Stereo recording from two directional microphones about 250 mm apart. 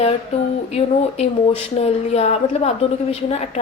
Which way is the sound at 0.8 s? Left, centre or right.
Left.